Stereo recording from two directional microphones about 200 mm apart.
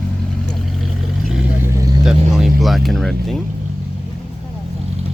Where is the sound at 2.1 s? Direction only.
Centre (ahead or behind).